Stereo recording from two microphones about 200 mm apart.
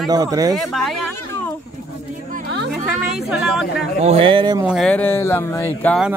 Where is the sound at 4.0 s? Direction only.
30° right (ahead or behind).